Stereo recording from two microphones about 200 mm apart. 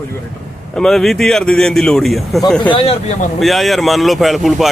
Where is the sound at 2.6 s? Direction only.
25° left (ahead or behind).